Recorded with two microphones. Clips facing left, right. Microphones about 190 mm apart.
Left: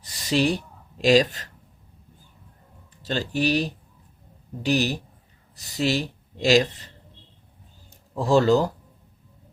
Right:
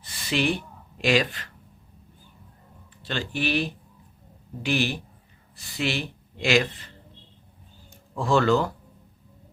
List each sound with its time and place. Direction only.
0.0 s a sound: 40° left (ahead or behind)
1.0 s speech: 40° left (ahead or behind)
3.0 s speech: 40° left (ahead or behind)
8.2 s speech: 35° left (ahead or behind)